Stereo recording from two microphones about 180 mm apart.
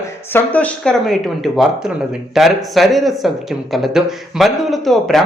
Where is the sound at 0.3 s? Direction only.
10° left (ahead or behind).